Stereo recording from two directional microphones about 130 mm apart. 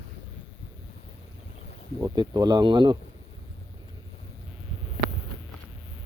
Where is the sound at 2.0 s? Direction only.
30° right (ahead or behind).